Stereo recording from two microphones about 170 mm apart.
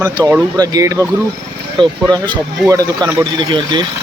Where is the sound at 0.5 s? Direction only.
20° right (ahead or behind).